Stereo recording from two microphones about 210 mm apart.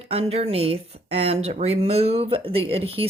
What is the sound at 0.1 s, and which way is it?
Speech, 30° right (ahead or behind).